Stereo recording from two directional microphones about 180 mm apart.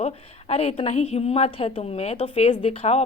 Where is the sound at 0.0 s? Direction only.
35° left (ahead or behind).